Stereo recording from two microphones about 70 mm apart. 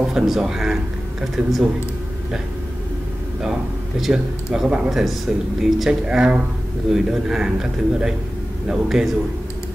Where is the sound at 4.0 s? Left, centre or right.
Centre.